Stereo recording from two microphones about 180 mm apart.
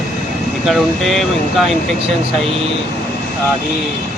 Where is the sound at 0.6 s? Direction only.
Centre (ahead or behind).